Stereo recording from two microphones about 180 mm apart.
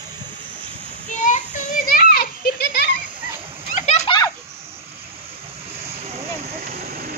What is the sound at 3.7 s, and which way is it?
Splash, 40° left (ahead or behind).